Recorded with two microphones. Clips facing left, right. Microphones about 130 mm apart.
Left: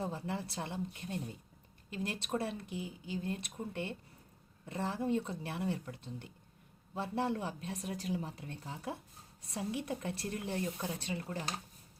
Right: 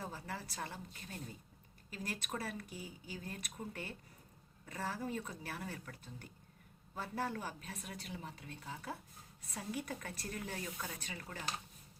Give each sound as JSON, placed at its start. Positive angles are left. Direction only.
{"t": 0.0, "sound": "speech", "side_deg": 25}